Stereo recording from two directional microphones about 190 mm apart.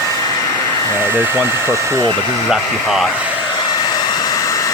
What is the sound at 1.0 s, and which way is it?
Speech, 10° right (ahead or behind).